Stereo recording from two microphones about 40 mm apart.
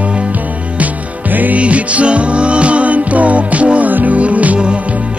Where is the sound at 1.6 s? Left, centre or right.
Right.